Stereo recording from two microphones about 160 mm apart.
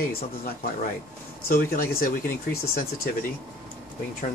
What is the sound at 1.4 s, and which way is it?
Speech, 65° left (ahead or behind).